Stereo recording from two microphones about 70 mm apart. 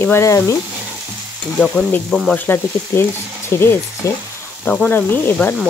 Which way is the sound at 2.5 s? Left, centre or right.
Left.